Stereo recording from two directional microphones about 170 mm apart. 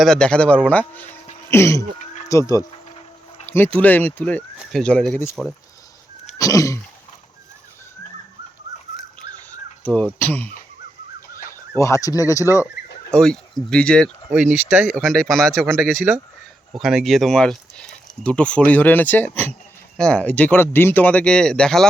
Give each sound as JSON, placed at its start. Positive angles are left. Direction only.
{"t": 0.0, "sound": "speech", "side_deg": 5}
{"t": 2.2, "sound": "a sound", "side_deg": 20}
{"t": 3.4, "sound": "speech", "side_deg": 10}
{"t": 6.4, "sound": "throat clearing", "side_deg": 20}
{"t": 9.8, "sound": "speech", "side_deg": 5}
{"t": 11.8, "sound": "speech", "side_deg": 20}
{"t": 13.1, "sound": "speech", "side_deg": 5}
{"t": 14.7, "sound": "speech", "side_deg": -10}
{"t": 14.9, "sound": "speech", "side_deg": 5}
{"t": 15.8, "sound": "speech", "side_deg": -15}
{"t": 16.7, "sound": "speech", "side_deg": 0}